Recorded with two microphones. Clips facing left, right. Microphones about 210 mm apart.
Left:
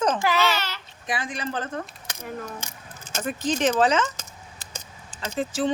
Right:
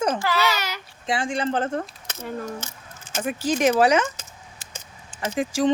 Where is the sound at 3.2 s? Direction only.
10° right (ahead or behind).